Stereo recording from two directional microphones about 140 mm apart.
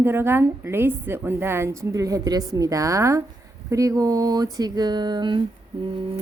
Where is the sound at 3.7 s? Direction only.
25° right (ahead or behind).